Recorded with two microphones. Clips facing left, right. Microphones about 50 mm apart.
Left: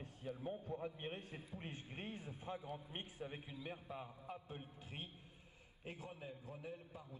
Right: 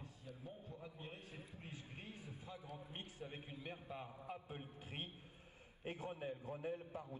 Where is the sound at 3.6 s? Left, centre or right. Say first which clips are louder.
Even; centre.